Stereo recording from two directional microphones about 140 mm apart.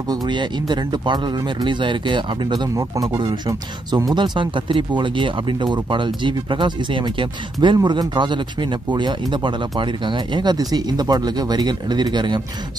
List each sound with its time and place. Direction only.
0.1 s speech: 30° right (ahead or behind)
2.7 s speech: 25° right (ahead or behind)